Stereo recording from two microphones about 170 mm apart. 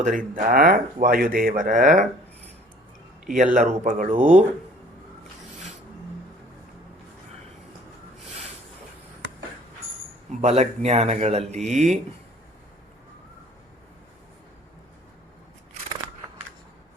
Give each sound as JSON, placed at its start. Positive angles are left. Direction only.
{"t": 0.0, "sound": "speech", "side_deg": -50}
{"t": 3.2, "sound": "speech", "side_deg": -50}
{"t": 10.4, "sound": "speech", "side_deg": -40}